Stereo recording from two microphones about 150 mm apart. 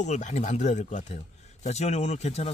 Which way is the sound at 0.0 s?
50° left (ahead or behind).